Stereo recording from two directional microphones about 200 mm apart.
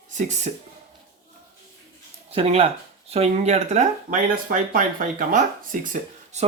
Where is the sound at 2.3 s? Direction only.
30° right (ahead or behind).